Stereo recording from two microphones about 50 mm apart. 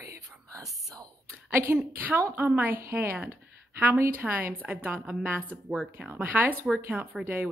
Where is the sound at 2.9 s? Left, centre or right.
Centre.